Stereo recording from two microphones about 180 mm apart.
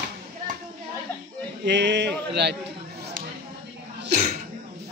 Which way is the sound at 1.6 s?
75° right (ahead or behind).